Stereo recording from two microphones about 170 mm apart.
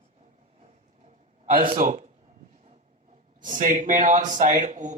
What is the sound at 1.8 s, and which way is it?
Speech, 45° right (ahead or behind).